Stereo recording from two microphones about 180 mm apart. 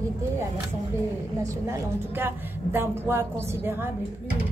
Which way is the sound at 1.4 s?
15° right (ahead or behind).